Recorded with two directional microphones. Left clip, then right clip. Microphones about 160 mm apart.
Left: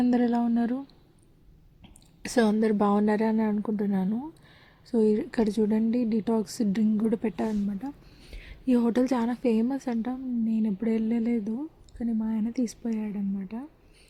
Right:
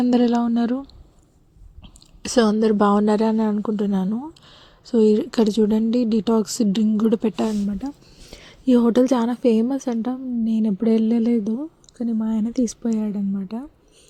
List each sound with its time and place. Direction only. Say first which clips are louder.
0.1 s a woman's voice: right 6 dB; 20° right (ahead or behind)
2.2 s a woman's voice: right 6 dB; 15° right (ahead or behind)